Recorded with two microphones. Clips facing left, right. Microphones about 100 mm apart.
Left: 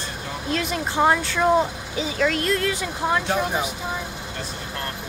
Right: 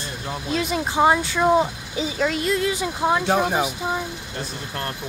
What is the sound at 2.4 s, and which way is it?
Speech, 10° right (ahead or behind).